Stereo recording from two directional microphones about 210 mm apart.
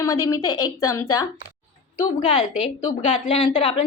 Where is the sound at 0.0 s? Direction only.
15° left (ahead or behind).